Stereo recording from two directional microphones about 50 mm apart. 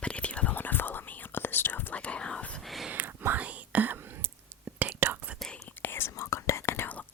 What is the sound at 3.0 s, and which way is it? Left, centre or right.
Whispering, right.